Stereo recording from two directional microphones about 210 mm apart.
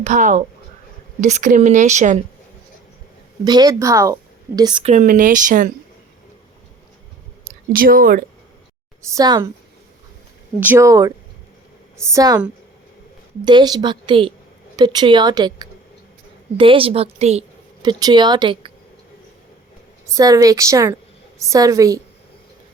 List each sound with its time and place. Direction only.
0.0 s speech: 35° right (ahead or behind)
3.4 s a woman's voice: 20° right (ahead or behind); by 5.6 s 40° right (ahead or behind)
7.7 s speech: 45° right (ahead or behind)
9.0 s a woman's voice: 15° right (ahead or behind)
10.6 s speech: 10° right (ahead or behind)
13.4 s a woman's voice: 20° right (ahead or behind)
17.8 s a woman's voice: 20° right (ahead or behind)
20.1 s a woman's voice: 15° right (ahead or behind)